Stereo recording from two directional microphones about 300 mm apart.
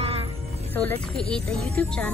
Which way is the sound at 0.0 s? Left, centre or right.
Centre.